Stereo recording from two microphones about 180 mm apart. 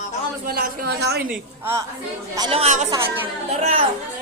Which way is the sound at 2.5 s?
35° right (ahead or behind).